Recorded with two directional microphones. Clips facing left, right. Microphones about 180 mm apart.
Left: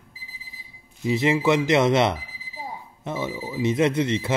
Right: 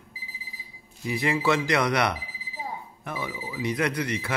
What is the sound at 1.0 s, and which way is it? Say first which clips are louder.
Speech: left 5 dB; 20° left (ahead or behind).